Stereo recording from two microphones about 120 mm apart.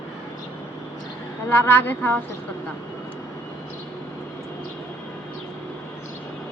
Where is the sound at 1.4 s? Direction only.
15° left (ahead or behind).